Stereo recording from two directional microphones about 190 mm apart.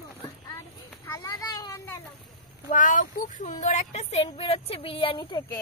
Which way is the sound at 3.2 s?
40° left (ahead or behind).